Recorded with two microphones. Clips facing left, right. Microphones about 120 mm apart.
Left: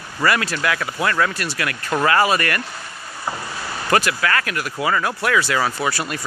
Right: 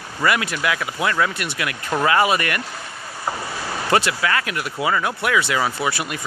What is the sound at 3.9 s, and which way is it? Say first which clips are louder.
Speech: left 1 dB; 20° right (ahead or behind).